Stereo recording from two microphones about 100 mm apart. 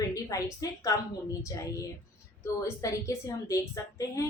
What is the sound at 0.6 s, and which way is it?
A woman's voice, 35° left (ahead or behind).